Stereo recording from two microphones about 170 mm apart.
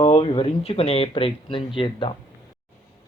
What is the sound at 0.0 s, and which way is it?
Speech, 35° left (ahead or behind).